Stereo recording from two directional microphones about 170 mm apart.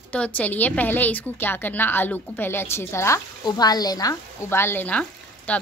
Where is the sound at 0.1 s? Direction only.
10° left (ahead or behind).